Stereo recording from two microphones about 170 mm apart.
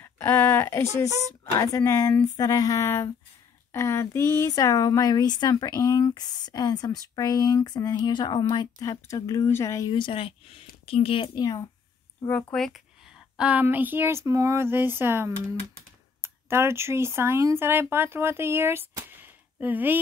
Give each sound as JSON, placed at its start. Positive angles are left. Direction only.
{"t": 0.0, "sound": "a sound", "side_deg": 10}
{"t": 1.6, "sound": "speech", "side_deg": 20}
{"t": 12.5, "sound": "a woman's voice", "side_deg": 0}